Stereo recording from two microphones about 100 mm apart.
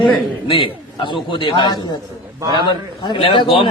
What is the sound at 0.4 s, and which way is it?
A man's voice, 60° left (ahead or behind).